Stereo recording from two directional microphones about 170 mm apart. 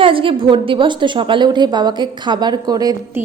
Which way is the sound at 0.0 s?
30° right (ahead or behind).